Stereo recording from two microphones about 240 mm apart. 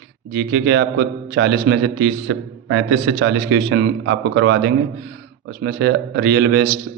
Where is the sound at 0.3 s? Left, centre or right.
Right.